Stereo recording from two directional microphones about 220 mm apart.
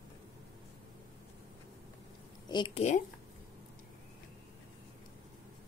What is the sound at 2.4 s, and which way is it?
Speech, 20° left (ahead or behind).